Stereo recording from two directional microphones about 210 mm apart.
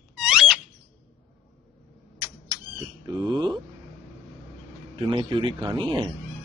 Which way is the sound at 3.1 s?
20° right (ahead or behind).